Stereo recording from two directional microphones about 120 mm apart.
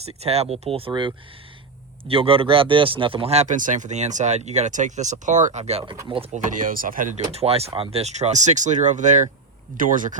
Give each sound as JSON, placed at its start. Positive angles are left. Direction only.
{"t": 0.0, "sound": "speech", "side_deg": -60}
{"t": 6.3, "sound": "speech", "side_deg": -90}